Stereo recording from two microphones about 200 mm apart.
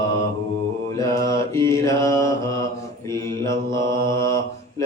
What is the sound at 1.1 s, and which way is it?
Mantra, 15° left (ahead or behind).